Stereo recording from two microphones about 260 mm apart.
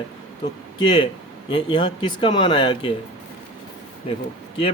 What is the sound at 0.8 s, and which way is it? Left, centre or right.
Speech, centre.